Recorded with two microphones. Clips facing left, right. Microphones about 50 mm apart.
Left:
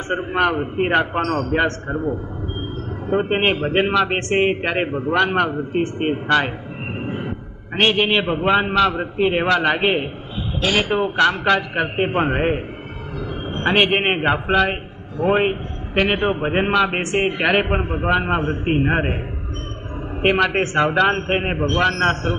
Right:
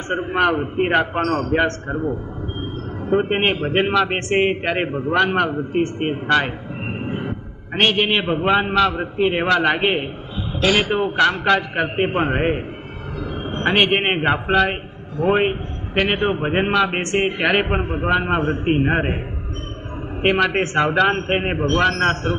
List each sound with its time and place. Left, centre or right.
0.1 s a man's voice: centre
3.1 s a man's voice: centre
6.9 s a sound: right
7.7 s a man's voice: centre
13.7 s a man's voice: centre
18.4 s a man's voice: right
18.8 s a man's voice: centre
20.2 s a man's voice: centre